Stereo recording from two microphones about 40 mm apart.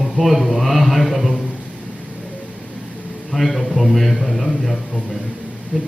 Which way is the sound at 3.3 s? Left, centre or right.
Centre.